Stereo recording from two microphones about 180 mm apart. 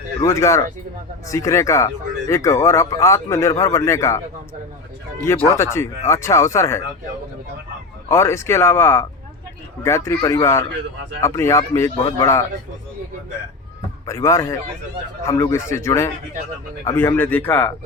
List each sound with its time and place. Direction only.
0.2 s speech: 15° left (ahead or behind)
5.2 s speech: 15° left (ahead or behind)
8.1 s speech: 15° left (ahead or behind)
11.9 s speech: 30° left (ahead or behind)
12.2 s speech: 15° left (ahead or behind)
14.1 s speech: 15° left (ahead or behind)